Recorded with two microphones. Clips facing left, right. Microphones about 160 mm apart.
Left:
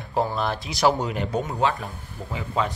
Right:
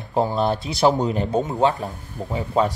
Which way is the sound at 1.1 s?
35° right (ahead or behind).